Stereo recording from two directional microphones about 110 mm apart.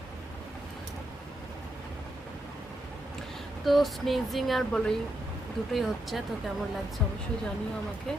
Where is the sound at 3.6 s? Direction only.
Centre (ahead or behind).